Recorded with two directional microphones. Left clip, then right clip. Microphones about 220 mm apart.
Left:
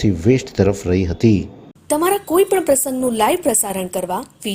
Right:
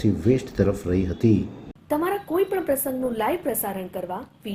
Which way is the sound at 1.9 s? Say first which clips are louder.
Left 8 dB; 50° left (ahead or behind).